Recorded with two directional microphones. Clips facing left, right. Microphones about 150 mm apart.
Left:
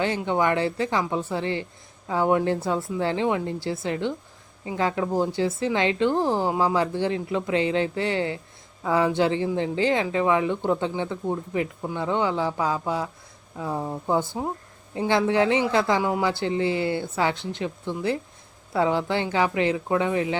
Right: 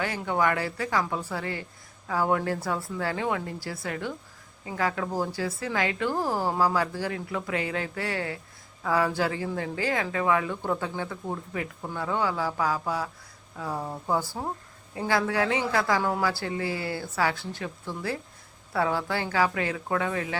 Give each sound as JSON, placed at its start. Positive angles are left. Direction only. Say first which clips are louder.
{"t": 0.2, "sound": "speech", "louder": "left 3 dB", "side_deg": 20}